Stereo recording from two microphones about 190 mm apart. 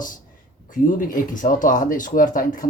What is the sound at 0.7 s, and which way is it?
Speech, 45° left (ahead or behind).